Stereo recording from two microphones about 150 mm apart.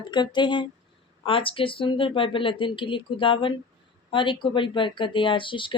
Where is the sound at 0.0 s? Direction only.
30° left (ahead or behind).